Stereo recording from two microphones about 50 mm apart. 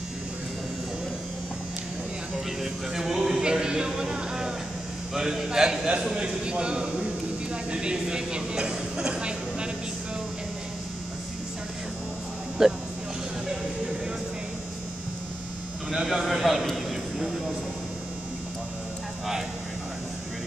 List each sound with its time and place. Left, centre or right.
2.6 s music: centre
5.1 s a man's voice: centre
12.6 s speech: centre
15.9 s a sound: centre
16.7 s vehicle: centre